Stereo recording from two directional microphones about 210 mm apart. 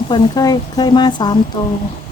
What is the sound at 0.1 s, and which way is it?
Speech, 20° left (ahead or behind).